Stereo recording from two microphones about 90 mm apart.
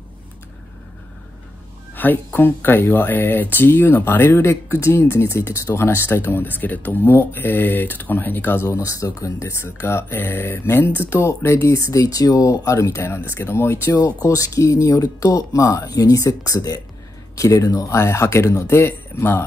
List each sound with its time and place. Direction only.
2.0 s speech: 20° left (ahead or behind)
8.6 s speech: 40° left (ahead or behind)
14.0 s speech: 40° left (ahead or behind)